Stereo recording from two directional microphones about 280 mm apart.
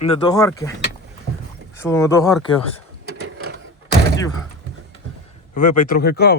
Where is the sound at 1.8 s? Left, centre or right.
Centre.